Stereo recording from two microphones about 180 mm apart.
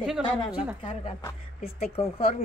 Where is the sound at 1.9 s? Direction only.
35° left (ahead or behind).